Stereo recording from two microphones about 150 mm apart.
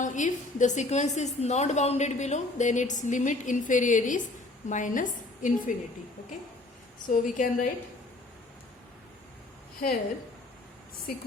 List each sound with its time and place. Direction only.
0.0 s a woman's voice: 55° left (ahead or behind)
7.1 s a woman's voice: 60° left (ahead or behind)